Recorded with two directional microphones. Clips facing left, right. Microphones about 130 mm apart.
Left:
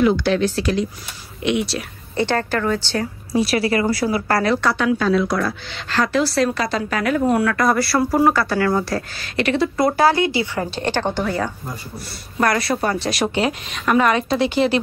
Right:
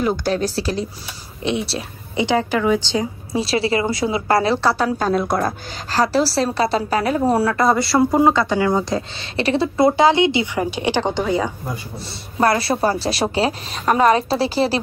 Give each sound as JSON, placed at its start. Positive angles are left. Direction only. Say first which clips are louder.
{"t": 0.0, "sound": "a woman's voice", "louder": "left 3 dB", "side_deg": -40}
{"t": 2.1, "sound": "speech", "louder": "right 2 dB", "side_deg": -15}
{"t": 3.3, "sound": "a woman's voice", "louder": "left 1 dB", "side_deg": -25}
{"t": 12.4, "sound": "a woman's voice", "louder": "right 2 dB", "side_deg": -30}